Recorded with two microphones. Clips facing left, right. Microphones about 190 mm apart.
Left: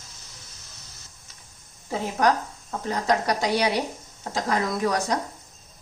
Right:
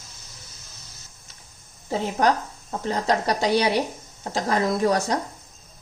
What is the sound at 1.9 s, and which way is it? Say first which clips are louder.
Speech: right 1 dB; 30° right (ahead or behind).